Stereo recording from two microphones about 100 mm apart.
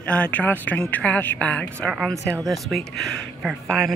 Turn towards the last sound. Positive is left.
turn(degrees=5)  # may be behind; listen again after turning